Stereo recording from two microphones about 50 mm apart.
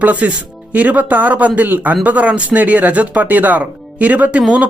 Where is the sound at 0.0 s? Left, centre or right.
Right.